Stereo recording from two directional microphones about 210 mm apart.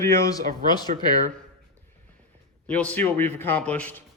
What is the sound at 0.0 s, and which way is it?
Speech, 15° left (ahead or behind).